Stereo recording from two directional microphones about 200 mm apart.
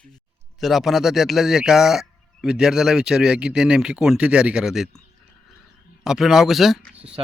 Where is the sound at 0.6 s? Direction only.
Centre (ahead or behind).